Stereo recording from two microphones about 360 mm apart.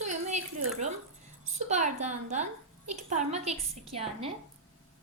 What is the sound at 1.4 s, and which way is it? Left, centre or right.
A woman's voice, centre.